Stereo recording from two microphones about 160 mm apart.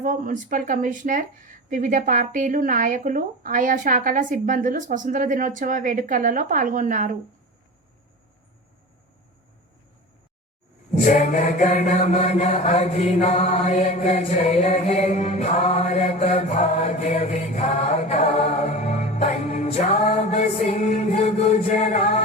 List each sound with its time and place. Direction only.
0.0 s speech: 55° right (ahead or behind)
11.0 s chant: 50° left (ahead or behind)